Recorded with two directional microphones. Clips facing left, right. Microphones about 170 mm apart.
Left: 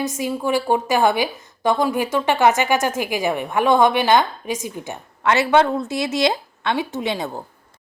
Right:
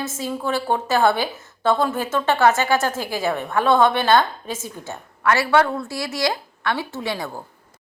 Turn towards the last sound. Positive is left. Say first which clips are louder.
# left 3 dB
turn(degrees=20)  # may be behind; listen again after turning